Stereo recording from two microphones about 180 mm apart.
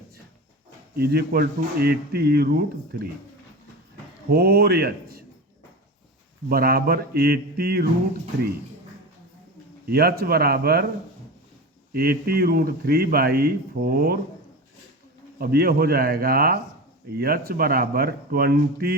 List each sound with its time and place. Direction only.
0.9 s speech: 60° right (ahead or behind)
4.3 s speech: 60° right (ahead or behind)
6.5 s speech: 55° right (ahead or behind)
9.8 s speech: 60° right (ahead or behind)
11.9 s speech: 55° right (ahead or behind)
15.4 s speech: 60° right (ahead or behind)